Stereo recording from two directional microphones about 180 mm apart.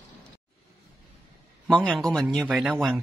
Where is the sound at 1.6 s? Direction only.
5° left (ahead or behind).